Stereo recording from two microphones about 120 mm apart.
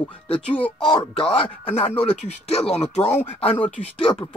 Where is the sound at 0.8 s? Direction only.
45° left (ahead or behind).